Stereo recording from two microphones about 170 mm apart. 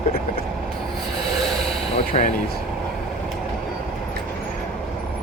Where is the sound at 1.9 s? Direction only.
35° left (ahead or behind).